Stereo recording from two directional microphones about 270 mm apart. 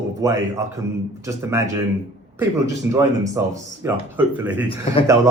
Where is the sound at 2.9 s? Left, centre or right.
Centre.